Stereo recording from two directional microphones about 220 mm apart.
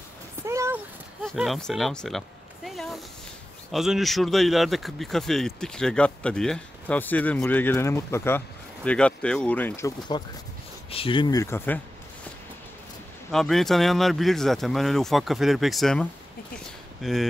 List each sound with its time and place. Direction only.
0.4 s a sound: 15° right (ahead or behind)
1.2 s a man's voice: centre (ahead or behind)
13.3 s a man's voice: centre (ahead or behind)